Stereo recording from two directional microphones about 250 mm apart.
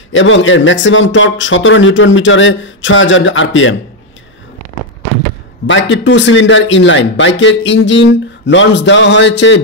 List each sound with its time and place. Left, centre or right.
0.1 s a man's voice: left
5.7 s a man's voice: left